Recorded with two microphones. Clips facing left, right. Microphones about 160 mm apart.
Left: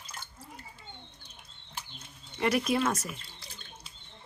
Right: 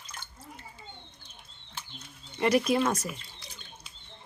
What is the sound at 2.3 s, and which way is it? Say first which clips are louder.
Bird: right 3 dB; centre (ahead or behind).